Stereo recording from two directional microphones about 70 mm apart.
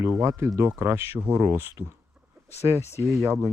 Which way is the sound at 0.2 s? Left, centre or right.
Right.